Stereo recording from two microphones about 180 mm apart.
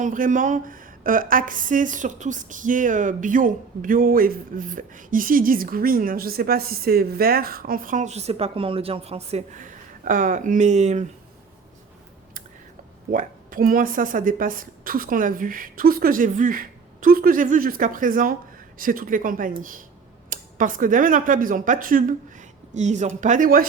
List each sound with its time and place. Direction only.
0.0 s a woman's voice: 45° right (ahead or behind)
13.1 s a woman's voice: 50° right (ahead or behind)